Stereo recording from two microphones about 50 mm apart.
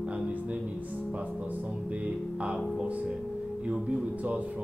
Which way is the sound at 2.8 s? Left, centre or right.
Right.